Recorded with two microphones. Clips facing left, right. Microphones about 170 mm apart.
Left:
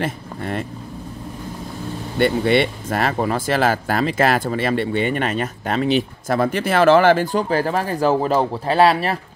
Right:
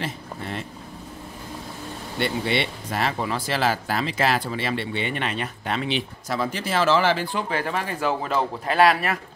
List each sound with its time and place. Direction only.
0.0 s speech: 55° left (ahead or behind)
2.1 s speech: 50° left (ahead or behind); by 9.2 s 30° left (ahead or behind)